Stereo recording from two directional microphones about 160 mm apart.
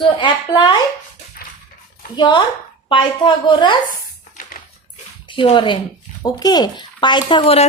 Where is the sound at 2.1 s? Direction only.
25° left (ahead or behind).